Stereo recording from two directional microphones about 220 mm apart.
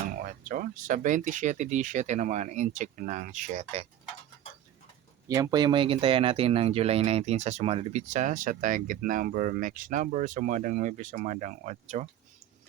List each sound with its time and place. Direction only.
0.2 s speech: 40° right (ahead or behind)
5.3 s speech: 15° right (ahead or behind)